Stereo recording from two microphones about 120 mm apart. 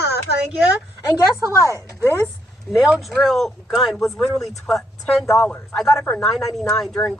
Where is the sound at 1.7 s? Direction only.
20° right (ahead or behind).